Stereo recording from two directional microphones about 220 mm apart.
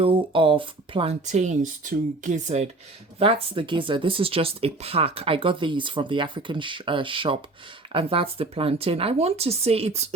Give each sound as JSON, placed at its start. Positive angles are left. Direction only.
{"t": 0.0, "sound": "speech", "side_deg": -25}